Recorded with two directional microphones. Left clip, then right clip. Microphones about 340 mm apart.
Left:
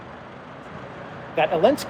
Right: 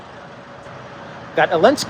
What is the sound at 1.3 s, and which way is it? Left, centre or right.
Speech, centre.